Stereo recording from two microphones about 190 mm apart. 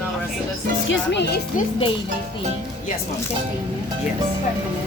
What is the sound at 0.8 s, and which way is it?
Speech, 70° left (ahead or behind).